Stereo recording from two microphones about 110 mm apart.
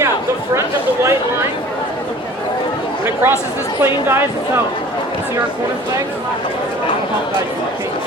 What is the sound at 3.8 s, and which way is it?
Speech, 20° right (ahead or behind).